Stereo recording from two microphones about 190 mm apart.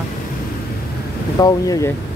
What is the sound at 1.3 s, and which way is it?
Speech, 20° left (ahead or behind).